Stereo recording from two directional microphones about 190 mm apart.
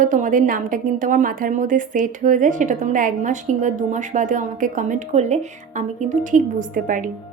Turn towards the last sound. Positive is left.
turn(degrees=-45)  # may be behind; listen again after turning